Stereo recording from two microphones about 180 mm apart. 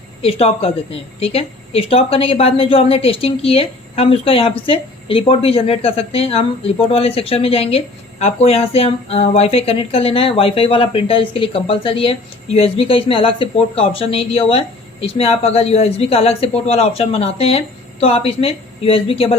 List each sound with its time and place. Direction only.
0.2 s a woman's voice: 35° left (ahead or behind)